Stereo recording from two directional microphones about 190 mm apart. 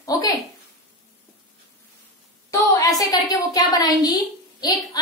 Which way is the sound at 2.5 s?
20° left (ahead or behind).